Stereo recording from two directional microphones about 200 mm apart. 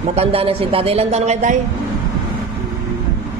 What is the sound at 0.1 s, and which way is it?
Speech, 30° right (ahead or behind).